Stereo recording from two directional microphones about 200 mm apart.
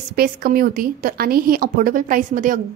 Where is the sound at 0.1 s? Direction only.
50° right (ahead or behind).